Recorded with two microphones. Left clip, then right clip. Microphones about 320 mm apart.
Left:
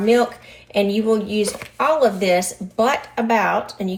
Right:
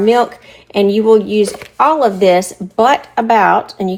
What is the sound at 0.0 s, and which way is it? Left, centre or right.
Speech, right.